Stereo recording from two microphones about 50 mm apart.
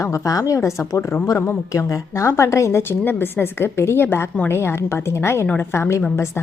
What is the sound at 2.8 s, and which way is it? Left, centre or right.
A woman's voice, left.